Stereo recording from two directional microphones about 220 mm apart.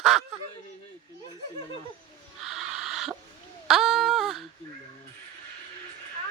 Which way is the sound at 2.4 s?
Centre (ahead or behind).